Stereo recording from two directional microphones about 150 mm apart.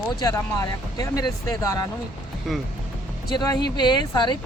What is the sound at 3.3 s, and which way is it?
Speech, 25° left (ahead or behind).